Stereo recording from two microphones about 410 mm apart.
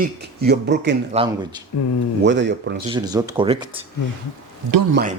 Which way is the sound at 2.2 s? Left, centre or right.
Right.